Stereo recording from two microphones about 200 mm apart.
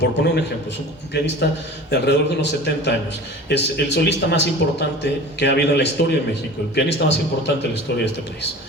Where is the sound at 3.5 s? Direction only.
60° left (ahead or behind).